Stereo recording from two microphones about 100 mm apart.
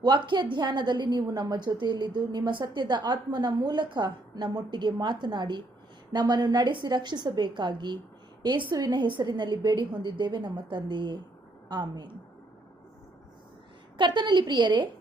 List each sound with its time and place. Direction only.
0.0 s a woman's voice: 45° right (ahead or behind)
13.9 s a woman's voice: 50° right (ahead or behind)